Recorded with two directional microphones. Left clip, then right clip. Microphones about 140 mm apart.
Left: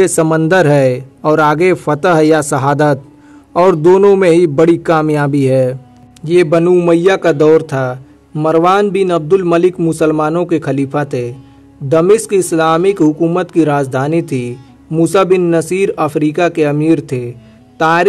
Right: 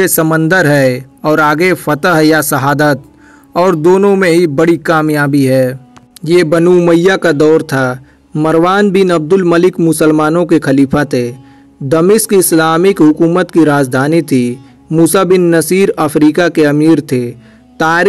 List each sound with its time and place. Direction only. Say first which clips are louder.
0.0 s speech: even; 25° right (ahead or behind)
6.6 s a man's voice: right 2 dB; 15° right (ahead or behind)
6.9 s speech: right 1 dB; 30° right (ahead or behind)